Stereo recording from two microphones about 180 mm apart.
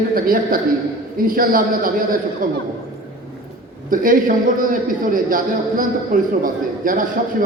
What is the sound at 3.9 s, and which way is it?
A man's voice, 50° right (ahead or behind).